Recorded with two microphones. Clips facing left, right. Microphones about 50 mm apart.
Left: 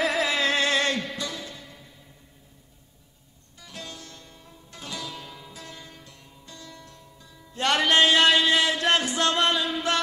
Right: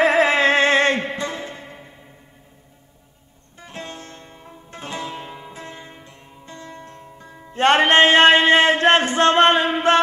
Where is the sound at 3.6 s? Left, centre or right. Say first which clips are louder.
Right 6 dB; right.